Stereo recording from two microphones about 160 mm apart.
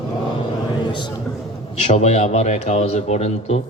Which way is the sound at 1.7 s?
45° left (ahead or behind).